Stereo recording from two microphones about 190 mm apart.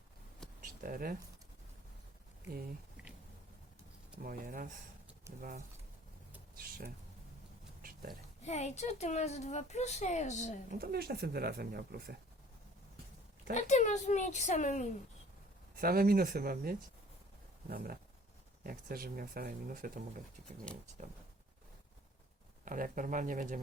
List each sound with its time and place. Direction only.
0.6 s a sound: 45° right (ahead or behind)
4.2 s speech: 50° right (ahead or behind)
7.8 s a sound: 50° right (ahead or behind)
8.4 s a woman's voice: 35° left (ahead or behind)
10.7 s speech: 55° right (ahead or behind)
13.5 s a woman's voice: 40° left (ahead or behind)
15.7 s speech: 50° right (ahead or behind)
22.6 s speech: 45° right (ahead or behind)